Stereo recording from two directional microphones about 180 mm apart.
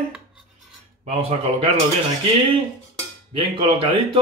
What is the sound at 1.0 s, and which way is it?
Speech, 35° right (ahead or behind).